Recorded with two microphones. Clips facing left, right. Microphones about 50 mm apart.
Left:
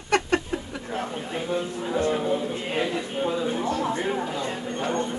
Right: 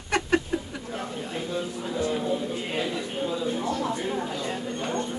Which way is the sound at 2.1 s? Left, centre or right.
Left.